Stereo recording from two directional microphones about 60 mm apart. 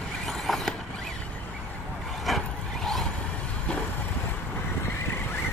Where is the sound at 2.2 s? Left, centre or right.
Centre.